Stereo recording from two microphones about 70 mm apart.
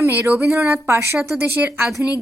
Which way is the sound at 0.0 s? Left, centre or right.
Right.